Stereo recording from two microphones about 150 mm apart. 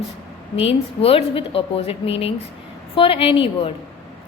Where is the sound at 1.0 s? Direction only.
40° left (ahead or behind).